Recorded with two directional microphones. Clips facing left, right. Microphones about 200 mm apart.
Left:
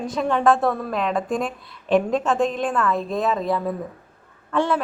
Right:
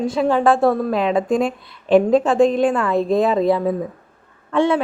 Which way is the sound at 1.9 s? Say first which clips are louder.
Right 6 dB; 30° right (ahead or behind).